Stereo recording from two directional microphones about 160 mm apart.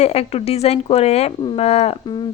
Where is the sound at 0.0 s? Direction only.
40° left (ahead or behind).